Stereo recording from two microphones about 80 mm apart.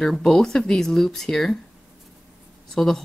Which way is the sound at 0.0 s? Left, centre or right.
Centre.